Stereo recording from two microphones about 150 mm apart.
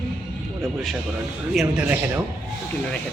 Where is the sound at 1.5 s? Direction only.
5° right (ahead or behind).